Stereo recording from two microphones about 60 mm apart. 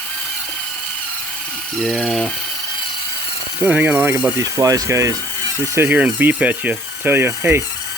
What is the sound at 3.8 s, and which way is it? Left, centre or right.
Speech, right.